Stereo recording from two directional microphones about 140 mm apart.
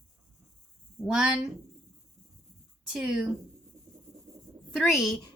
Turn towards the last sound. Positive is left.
turn(degrees=0)  # may be behind; listen again after turning